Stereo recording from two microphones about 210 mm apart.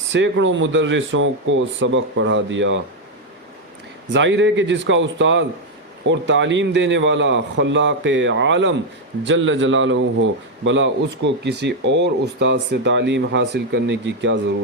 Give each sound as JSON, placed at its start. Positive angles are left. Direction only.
{"t": 0.1, "sound": "speech", "side_deg": -60}
{"t": 4.1, "sound": "speech", "side_deg": -60}